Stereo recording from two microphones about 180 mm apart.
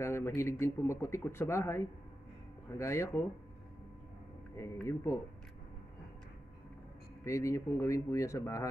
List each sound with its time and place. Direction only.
0.0 s speech: 15° left (ahead or behind)
4.8 s speech: 15° left (ahead or behind)
7.2 s speech: 15° left (ahead or behind)